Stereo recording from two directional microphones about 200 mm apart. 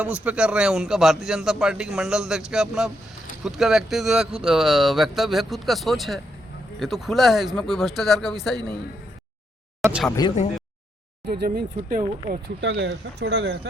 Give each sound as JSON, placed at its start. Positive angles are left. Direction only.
{"t": 0.0, "sound": "a man's voice", "side_deg": -5}
{"t": 9.8, "sound": "a sound", "side_deg": 0}
{"t": 11.3, "sound": "speech", "side_deg": -50}
{"t": 12.6, "sound": "speech", "side_deg": -60}